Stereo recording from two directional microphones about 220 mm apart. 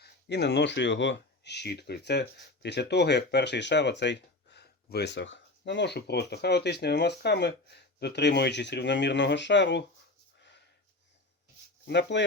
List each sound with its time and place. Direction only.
0.0 s speech: 50° left (ahead or behind)
11.9 s speech: 50° left (ahead or behind)